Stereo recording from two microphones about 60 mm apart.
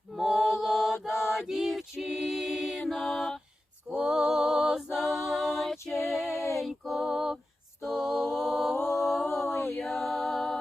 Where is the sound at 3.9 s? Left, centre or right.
Centre.